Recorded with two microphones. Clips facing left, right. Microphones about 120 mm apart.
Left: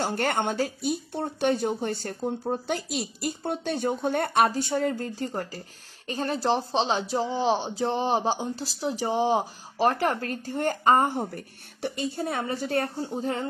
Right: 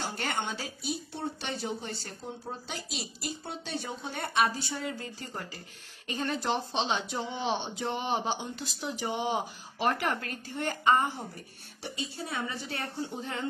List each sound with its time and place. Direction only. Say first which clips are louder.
0.0 s speech: left 8 dB; 50° left (ahead or behind)